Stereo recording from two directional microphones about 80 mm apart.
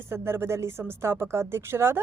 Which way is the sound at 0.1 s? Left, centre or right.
Right.